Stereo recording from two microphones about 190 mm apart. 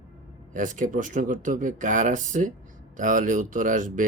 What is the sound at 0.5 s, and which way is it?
Speech, 45° right (ahead or behind).